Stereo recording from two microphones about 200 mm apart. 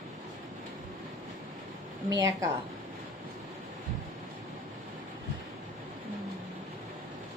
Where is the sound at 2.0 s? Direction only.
15° right (ahead or behind).